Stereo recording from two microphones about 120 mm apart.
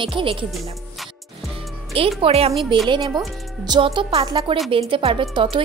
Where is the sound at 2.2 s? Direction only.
55° right (ahead or behind).